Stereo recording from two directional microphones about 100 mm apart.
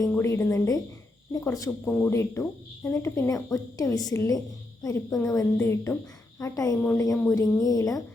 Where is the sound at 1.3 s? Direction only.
35° left (ahead or behind).